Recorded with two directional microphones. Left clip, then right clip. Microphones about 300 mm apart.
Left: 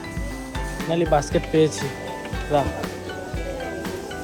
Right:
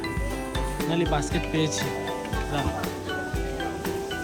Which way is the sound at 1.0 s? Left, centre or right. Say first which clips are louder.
Left 6 dB; centre.